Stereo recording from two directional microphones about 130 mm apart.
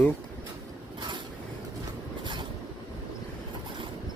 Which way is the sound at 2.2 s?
35° right (ahead or behind).